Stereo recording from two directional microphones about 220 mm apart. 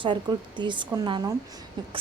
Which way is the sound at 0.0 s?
20° right (ahead or behind).